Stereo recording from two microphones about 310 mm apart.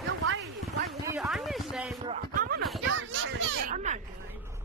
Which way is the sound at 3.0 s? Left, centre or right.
Right.